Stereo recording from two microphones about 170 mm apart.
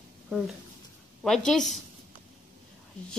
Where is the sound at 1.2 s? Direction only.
5° left (ahead or behind).